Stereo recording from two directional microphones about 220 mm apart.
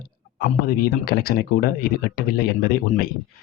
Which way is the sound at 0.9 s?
45° left (ahead or behind).